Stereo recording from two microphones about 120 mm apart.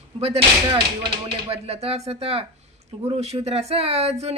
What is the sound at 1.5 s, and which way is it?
Speech, 55° right (ahead or behind).